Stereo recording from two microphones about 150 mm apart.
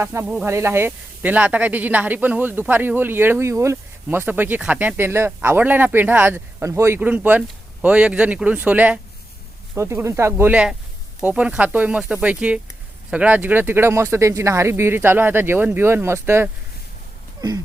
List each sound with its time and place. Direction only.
0.0 s speech: 15° right (ahead or behind)